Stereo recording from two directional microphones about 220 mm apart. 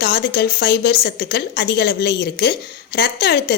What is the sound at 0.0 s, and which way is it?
Speech, 50° left (ahead or behind).